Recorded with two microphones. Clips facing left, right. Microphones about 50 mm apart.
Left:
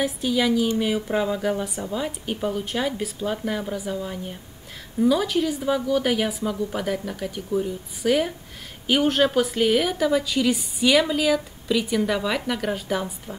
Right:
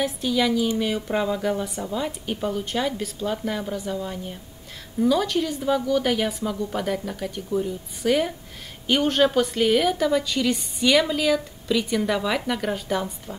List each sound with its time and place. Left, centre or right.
0.0 s speech: centre